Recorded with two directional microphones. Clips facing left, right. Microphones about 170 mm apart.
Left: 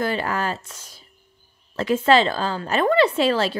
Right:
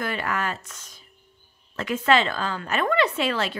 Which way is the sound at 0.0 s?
30° left (ahead or behind).